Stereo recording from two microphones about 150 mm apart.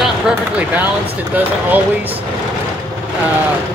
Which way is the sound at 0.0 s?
10° right (ahead or behind).